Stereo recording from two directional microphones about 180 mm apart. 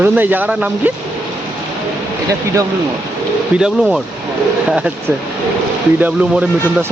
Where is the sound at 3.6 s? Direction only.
5° right (ahead or behind).